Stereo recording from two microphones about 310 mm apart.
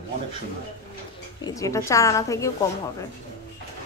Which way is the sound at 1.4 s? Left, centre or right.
Centre.